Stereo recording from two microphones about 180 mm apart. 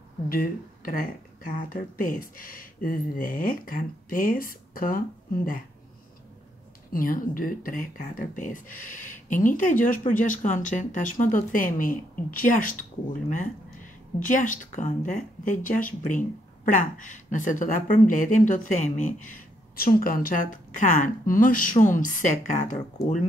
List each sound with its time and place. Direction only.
0.3 s speech: 50° left (ahead or behind)
6.9 s speech: 50° left (ahead or behind)
14.2 s speech: 45° left (ahead or behind)